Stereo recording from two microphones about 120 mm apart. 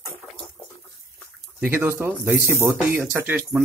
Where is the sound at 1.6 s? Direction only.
20° right (ahead or behind).